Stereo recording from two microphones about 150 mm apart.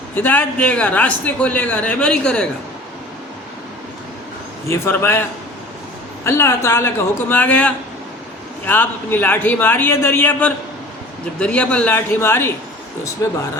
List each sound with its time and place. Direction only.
0.2 s a man's voice: 10° left (ahead or behind)
4.7 s a man's voice: 15° left (ahead or behind)
6.2 s a man's voice: 15° left (ahead or behind)